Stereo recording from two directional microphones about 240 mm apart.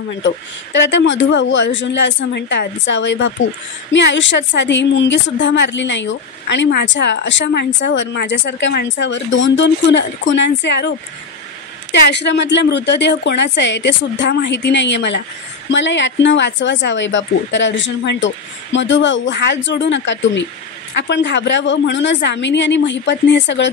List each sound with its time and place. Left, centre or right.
0.7 s a woman's voice: left